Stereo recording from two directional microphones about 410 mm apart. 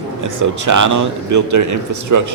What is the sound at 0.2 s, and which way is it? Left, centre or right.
A man's voice, right.